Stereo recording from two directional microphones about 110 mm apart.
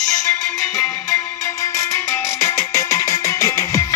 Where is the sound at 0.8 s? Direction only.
15° left (ahead or behind).